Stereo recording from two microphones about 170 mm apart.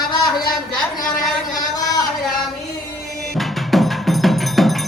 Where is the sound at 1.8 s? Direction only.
20° left (ahead or behind).